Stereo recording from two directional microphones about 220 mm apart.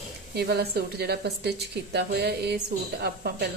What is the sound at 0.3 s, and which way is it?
Speech, 45° right (ahead or behind).